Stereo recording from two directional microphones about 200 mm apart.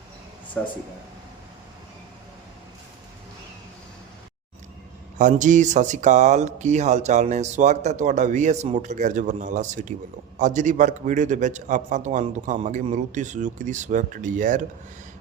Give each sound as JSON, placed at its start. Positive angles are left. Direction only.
{"t": 0.6, "sound": "speech", "side_deg": 5}
{"t": 5.1, "sound": "speech", "side_deg": -40}